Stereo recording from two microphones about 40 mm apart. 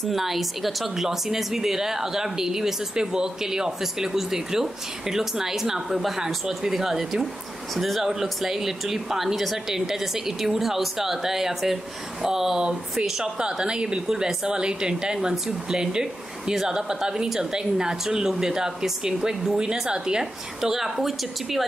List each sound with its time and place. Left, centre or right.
0.1 s a woman's voice: centre